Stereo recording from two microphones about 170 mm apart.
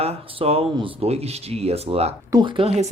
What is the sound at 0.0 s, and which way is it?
Speech, 35° right (ahead or behind).